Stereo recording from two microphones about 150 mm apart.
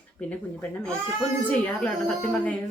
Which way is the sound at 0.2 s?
10° left (ahead or behind).